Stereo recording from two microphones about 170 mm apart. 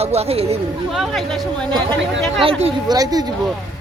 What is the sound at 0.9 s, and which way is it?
Speech, centre (ahead or behind).